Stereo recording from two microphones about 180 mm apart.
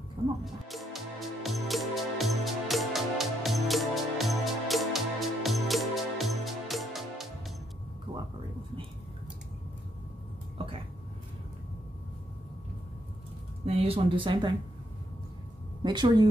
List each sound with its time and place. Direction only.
0.7 s music: centre (ahead or behind)
13.7 s speech: 30° right (ahead or behind)
15.8 s a woman's voice: 25° right (ahead or behind)